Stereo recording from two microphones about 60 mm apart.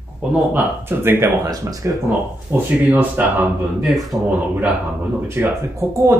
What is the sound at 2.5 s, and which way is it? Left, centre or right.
Speech, right.